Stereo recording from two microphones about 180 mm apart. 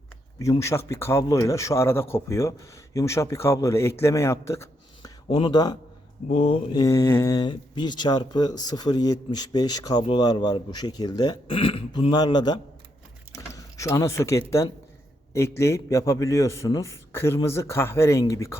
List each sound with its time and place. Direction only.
0.6 s speech: 15° left (ahead or behind)
6.2 s speech: 35° left (ahead or behind); by 18.5 s 15° left (ahead or behind)